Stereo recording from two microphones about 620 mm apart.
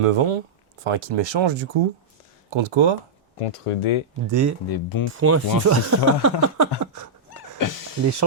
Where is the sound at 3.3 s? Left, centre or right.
Left.